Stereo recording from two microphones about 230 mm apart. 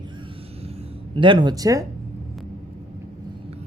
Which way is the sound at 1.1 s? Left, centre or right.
Right.